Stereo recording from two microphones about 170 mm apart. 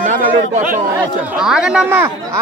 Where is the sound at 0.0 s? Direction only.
50° right (ahead or behind).